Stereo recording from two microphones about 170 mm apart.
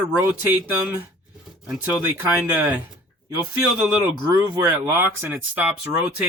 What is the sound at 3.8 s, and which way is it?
Speech, 10° right (ahead or behind).